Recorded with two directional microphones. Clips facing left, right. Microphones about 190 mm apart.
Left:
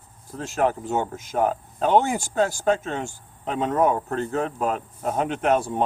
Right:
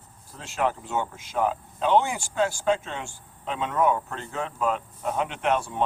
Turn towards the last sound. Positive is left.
turn(degrees=40)  # may be behind; listen again after turning